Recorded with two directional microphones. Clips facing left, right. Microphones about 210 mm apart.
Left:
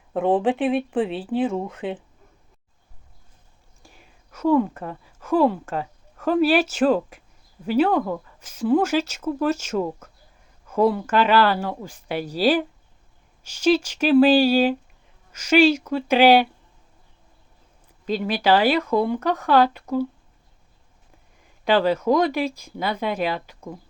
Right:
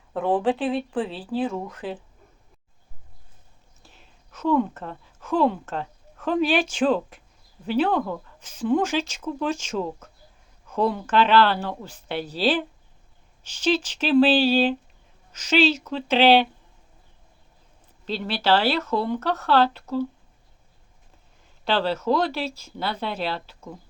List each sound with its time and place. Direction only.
0.1 s speech: 20° left (ahead or behind)
3.8 s speech: 10° left (ahead or behind)
18.0 s speech: 10° left (ahead or behind)
21.6 s speech: 10° left (ahead or behind)